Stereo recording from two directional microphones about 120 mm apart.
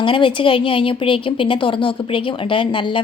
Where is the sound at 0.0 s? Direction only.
45° left (ahead or behind).